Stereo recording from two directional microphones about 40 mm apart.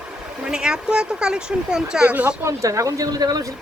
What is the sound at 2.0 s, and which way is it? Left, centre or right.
Speech, right.